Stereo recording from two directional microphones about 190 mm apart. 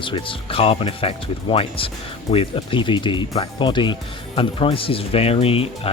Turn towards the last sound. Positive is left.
turn(degrees=30)  # may be behind; listen again after turning